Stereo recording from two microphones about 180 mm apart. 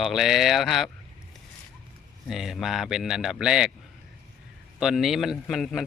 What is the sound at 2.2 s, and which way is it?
A man's voice, centre (ahead or behind).